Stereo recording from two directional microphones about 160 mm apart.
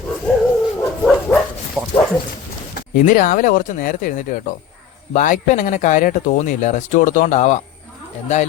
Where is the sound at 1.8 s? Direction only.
Centre (ahead or behind).